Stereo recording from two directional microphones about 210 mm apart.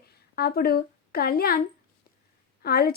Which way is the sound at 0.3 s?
45° left (ahead or behind).